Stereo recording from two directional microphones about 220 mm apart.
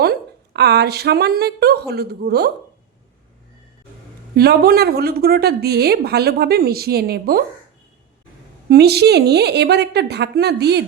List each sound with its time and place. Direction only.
0.0 s a woman's voice: 45° right (ahead or behind)
4.4 s a woman's voice: 45° right (ahead or behind)
8.7 s a woman's voice: 45° right (ahead or behind)